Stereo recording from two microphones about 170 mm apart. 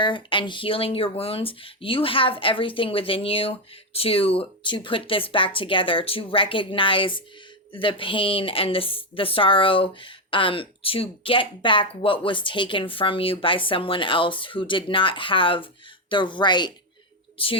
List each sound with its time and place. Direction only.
0.0 s speech: 30° left (ahead or behind)